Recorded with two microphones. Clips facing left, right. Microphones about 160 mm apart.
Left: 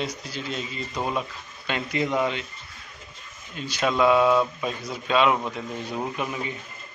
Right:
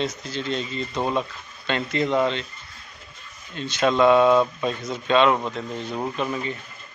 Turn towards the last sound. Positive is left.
turn(degrees=10)  # may be behind; listen again after turning